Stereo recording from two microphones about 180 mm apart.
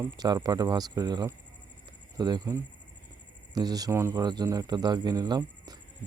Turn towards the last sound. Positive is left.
turn(degrees=-25)  # may be behind; listen again after turning